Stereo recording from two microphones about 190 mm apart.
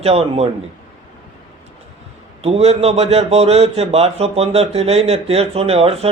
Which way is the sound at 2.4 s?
30° right (ahead or behind).